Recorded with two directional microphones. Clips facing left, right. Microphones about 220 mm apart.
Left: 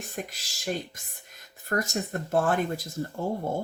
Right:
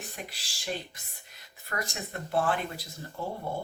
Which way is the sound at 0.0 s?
45° left (ahead or behind).